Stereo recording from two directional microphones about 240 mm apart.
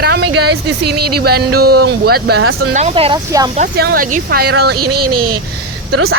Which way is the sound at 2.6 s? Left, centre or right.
Right.